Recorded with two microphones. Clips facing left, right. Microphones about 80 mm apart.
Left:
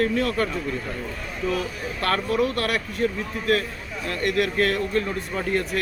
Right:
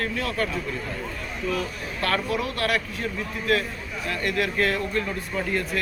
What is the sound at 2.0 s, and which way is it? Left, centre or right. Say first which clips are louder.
Speech: left 3 dB; left.